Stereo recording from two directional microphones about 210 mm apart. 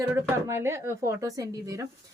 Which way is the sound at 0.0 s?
15° right (ahead or behind).